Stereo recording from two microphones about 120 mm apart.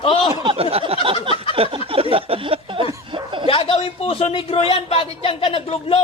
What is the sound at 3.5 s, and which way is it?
Speech, 50° left (ahead or behind).